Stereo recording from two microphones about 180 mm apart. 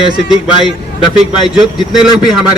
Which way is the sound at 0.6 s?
25° left (ahead or behind).